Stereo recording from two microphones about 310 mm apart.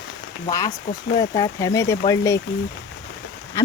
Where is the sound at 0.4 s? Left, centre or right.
Centre.